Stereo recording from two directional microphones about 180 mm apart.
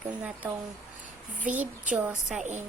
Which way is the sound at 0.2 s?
5° right (ahead or behind).